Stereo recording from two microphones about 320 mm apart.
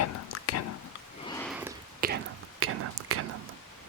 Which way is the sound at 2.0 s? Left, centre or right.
Right.